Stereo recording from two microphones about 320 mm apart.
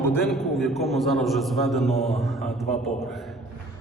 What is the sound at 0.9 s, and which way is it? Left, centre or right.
Speech, centre.